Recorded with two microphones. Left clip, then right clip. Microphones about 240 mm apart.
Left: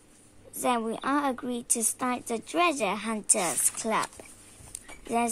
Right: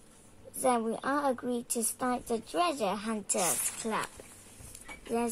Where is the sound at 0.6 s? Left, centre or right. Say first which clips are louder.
Left 1 dB; left.